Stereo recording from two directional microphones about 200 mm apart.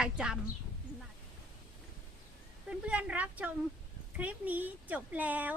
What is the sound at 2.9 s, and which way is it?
Speech, 5° right (ahead or behind).